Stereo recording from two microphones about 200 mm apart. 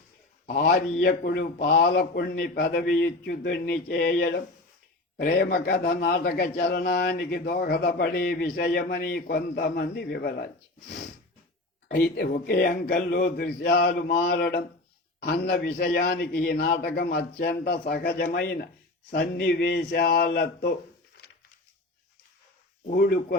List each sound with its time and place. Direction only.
0.4 s a man's voice: 45° left (ahead or behind)
22.9 s a man's voice: 50° left (ahead or behind)